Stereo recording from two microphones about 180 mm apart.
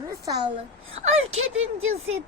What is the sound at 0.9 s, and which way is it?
Speech, 35° right (ahead or behind).